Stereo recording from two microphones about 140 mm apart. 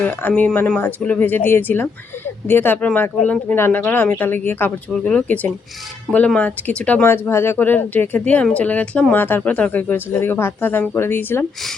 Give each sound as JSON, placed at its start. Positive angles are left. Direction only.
{"t": 0.0, "sound": "speech", "side_deg": 10}